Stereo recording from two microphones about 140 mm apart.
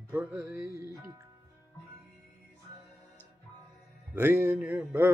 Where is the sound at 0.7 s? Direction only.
20° right (ahead or behind).